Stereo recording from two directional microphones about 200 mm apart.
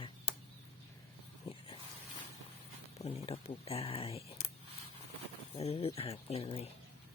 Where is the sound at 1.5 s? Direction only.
30° left (ahead or behind).